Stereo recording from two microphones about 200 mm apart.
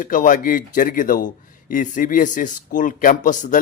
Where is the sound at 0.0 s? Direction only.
40° left (ahead or behind).